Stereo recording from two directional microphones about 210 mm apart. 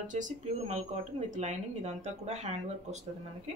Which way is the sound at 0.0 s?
35° right (ahead or behind).